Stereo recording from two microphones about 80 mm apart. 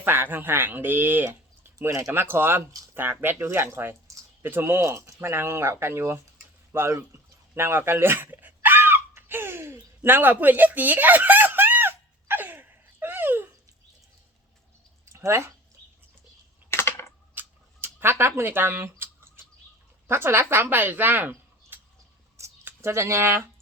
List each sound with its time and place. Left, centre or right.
0.0 s speech: right
1.9 s speech: right
2.1 s speech: right
6.7 s a sound: right
10.0 s chicken: right
15.1 s speech: right
16.7 s typing: left
17.3 s scissors: right
20.1 s speech: right
22.4 s a sound: right